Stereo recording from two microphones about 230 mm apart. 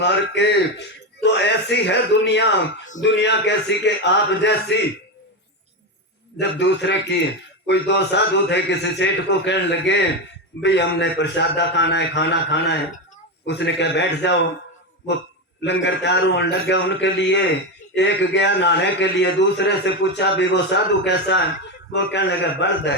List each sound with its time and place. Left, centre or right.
0.0 s a man's voice: left
6.4 s a man's voice: left
15.6 s a man's voice: left